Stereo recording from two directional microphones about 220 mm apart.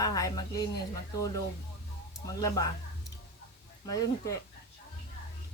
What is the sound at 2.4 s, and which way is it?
A woman's voice, 15° left (ahead or behind).